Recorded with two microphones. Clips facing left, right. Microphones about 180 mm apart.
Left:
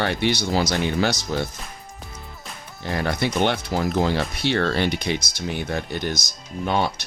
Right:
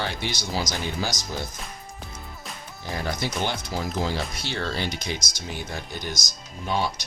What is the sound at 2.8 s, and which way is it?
Speech, 70° left (ahead or behind).